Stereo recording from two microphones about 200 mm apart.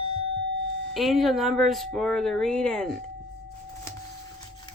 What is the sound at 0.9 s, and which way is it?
Speech, centre (ahead or behind).